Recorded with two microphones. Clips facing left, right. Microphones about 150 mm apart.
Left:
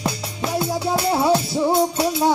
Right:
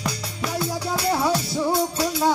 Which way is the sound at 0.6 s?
25° left (ahead or behind).